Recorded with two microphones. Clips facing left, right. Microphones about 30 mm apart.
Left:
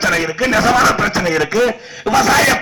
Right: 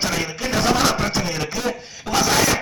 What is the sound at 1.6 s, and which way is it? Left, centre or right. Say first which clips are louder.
Speech: left 7 dB; left.